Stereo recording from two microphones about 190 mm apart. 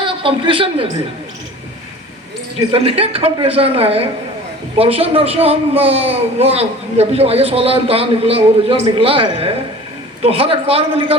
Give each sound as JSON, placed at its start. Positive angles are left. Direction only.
{"t": 0.0, "sound": "a woman's voice", "side_deg": -25}
{"t": 2.6, "sound": "a man's voice", "side_deg": -30}